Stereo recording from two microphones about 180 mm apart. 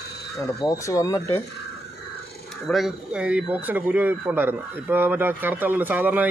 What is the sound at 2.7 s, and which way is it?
A man's voice, centre (ahead or behind).